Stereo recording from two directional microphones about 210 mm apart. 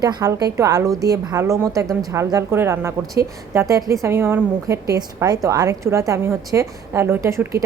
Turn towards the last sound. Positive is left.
turn(degrees=-15)  # may be behind; listen again after turning